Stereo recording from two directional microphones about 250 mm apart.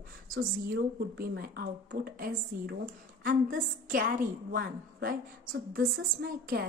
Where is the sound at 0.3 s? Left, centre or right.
Right.